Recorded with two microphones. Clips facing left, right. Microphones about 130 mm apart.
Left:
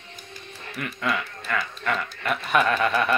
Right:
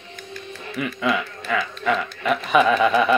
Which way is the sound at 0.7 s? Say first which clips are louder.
Right 5 dB; 10° right (ahead or behind).